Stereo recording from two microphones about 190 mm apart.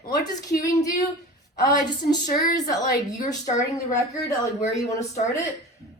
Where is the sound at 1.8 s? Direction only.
20° left (ahead or behind).